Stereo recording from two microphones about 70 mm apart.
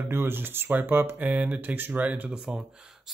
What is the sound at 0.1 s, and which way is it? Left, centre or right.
Speech, right.